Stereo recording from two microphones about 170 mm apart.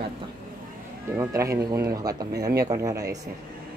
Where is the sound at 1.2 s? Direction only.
20° right (ahead or behind).